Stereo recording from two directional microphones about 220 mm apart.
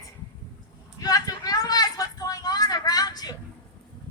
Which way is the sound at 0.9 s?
15° left (ahead or behind).